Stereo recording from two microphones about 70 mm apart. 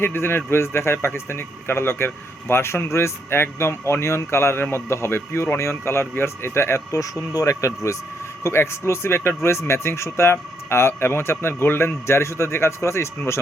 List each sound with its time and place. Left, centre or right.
0.0 s speech: left
6.9 s speech: left